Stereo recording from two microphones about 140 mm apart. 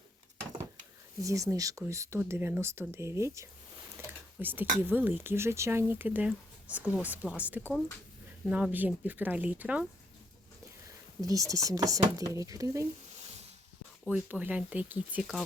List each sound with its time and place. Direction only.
1.2 s speech: 25° right (ahead or behind)
3.9 s a sound: 15° right (ahead or behind)
4.8 s speech: 15° right (ahead or behind)
11.2 s speech: 25° right (ahead or behind)
14.1 s speech: 10° right (ahead or behind)